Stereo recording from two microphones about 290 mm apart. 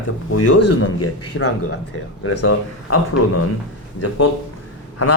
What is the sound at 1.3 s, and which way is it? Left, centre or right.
Speech, left.